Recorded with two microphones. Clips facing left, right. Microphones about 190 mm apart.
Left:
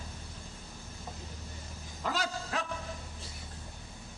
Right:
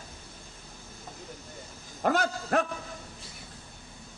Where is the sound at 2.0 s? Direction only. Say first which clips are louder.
Right 8 dB; 55° right (ahead or behind).